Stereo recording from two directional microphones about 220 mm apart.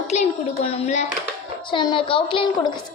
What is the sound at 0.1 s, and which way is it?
A child's voice, 30° left (ahead or behind).